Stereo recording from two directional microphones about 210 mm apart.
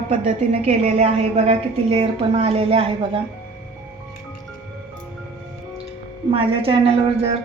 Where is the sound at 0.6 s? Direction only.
30° right (ahead or behind).